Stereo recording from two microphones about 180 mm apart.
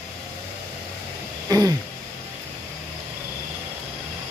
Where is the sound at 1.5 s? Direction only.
20° right (ahead or behind).